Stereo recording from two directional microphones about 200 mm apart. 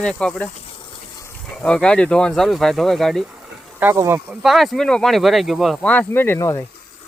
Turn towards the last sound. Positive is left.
turn(degrees=15)  # may be behind; listen again after turning